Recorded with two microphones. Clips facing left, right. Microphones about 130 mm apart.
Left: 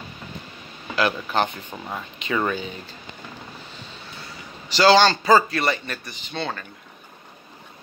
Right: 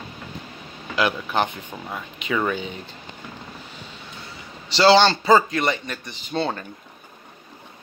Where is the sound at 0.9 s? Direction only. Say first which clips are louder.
Even; 15° right (ahead or behind).